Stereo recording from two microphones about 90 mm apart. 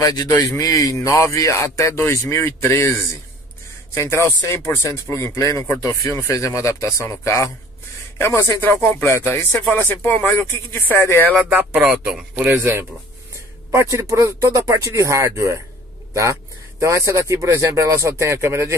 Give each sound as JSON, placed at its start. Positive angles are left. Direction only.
{"t": 0.0, "sound": "speech", "side_deg": 40}
{"t": 3.9, "sound": "speech", "side_deg": 30}
{"t": 11.7, "sound": "speech", "side_deg": -5}
{"t": 12.4, "sound": "speech", "side_deg": -20}